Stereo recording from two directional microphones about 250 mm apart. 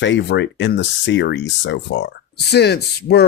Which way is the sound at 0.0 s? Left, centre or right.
Left.